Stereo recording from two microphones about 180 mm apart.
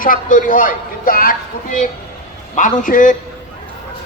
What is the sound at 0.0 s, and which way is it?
A woman's voice, 50° left (ahead or behind).